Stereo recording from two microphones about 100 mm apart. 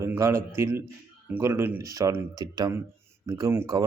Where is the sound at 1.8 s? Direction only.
35° right (ahead or behind).